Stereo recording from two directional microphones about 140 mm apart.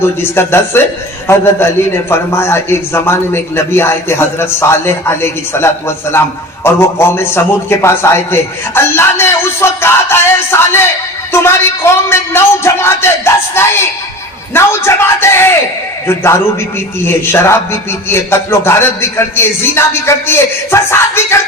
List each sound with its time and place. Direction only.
0.0 s a man's voice: 15° left (ahead or behind)